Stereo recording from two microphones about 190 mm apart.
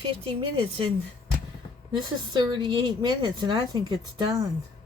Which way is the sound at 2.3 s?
20° right (ahead or behind).